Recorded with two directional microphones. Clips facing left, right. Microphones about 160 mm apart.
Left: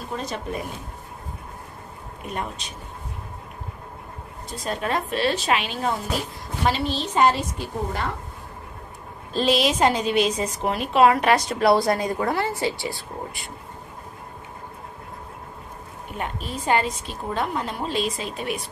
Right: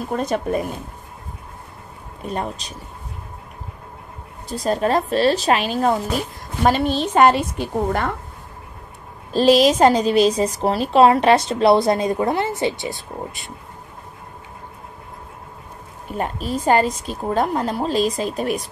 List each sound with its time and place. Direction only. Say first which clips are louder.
0.1 s speech: right 8 dB; 55° right (ahead or behind)
2.2 s a woman's voice: right 5 dB; 35° right (ahead or behind)
4.5 s a woman's voice: right 7 dB; 35° right (ahead or behind); by 8.1 s 60° right (ahead or behind)
9.4 s a woman's voice: right 7 dB; 40° right (ahead or behind); by 13.5 s 20° right (ahead or behind)
16.1 s a woman's voice: right 7 dB; 40° right (ahead or behind)